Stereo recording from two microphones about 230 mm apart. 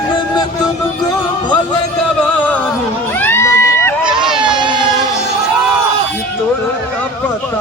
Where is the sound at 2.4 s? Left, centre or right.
Centre.